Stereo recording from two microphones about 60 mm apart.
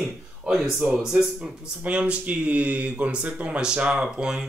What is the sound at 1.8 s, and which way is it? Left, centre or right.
Speech, centre.